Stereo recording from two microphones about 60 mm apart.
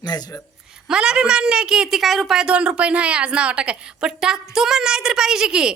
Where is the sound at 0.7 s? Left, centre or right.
Centre.